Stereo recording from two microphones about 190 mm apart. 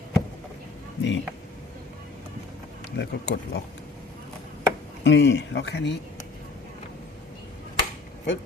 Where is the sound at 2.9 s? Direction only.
60° left (ahead or behind).